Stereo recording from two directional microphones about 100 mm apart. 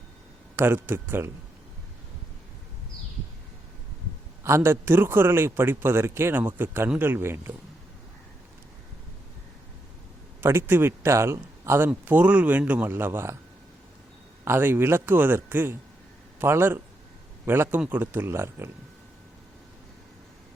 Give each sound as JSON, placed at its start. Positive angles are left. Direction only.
{"t": 0.5, "sound": "a man's voice", "side_deg": -20}
{"t": 4.4, "sound": "a man's voice", "side_deg": -25}
{"t": 10.4, "sound": "a man's voice", "side_deg": -25}
{"t": 11.9, "sound": "speech", "side_deg": -15}
{"t": 14.4, "sound": "a man's voice", "side_deg": -25}